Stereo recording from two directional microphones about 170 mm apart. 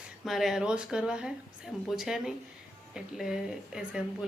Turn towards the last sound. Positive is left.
turn(degrees=-5)  # may be behind; listen again after turning